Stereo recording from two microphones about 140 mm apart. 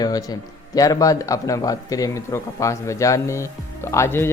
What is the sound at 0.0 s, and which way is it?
Speech, 25° left (ahead or behind).